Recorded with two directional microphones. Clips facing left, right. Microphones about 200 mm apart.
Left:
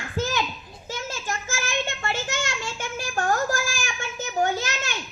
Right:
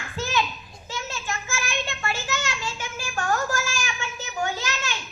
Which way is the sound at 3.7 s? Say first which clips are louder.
Even; 50° left (ahead or behind).